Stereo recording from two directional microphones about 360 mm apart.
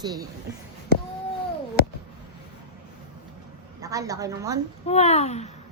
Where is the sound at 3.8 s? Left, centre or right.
Centre.